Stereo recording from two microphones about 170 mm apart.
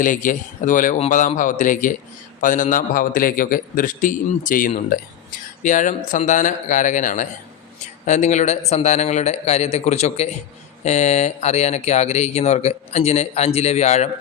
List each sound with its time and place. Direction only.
0.0 s a man's voice: 50° left (ahead or behind)